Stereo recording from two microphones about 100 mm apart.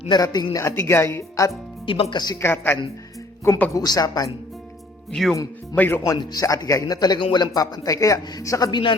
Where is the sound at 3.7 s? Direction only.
40° left (ahead or behind).